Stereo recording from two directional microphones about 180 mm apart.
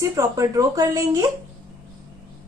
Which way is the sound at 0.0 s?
20° right (ahead or behind).